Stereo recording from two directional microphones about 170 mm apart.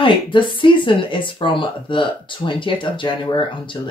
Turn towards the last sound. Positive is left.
turn(degrees=30)  # may be behind; listen again after turning